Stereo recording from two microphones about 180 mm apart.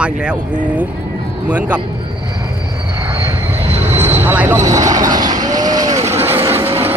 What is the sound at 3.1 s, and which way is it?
Vehicle, 15° right (ahead or behind).